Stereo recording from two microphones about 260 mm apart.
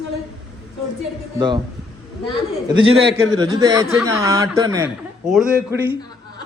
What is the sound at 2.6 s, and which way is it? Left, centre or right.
A man's voice, centre.